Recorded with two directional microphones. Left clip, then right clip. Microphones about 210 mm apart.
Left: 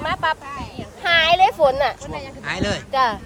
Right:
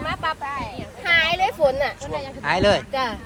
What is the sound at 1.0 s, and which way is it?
Speech, 35° left (ahead or behind).